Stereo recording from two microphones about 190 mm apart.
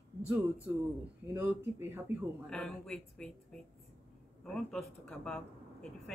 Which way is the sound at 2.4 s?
5° left (ahead or behind).